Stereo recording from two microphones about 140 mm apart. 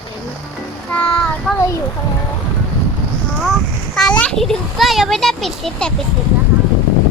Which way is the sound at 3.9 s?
5° left (ahead or behind).